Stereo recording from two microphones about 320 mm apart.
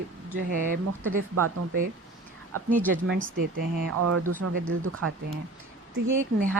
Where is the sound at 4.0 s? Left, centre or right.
Right.